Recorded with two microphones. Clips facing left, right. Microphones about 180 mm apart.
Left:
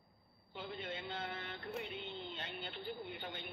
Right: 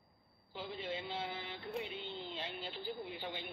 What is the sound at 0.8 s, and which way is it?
Speech, 30° right (ahead or behind).